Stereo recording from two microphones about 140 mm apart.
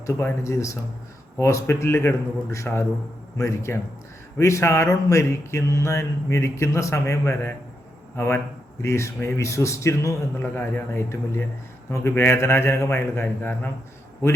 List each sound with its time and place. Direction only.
0.0 s speech: 20° left (ahead or behind)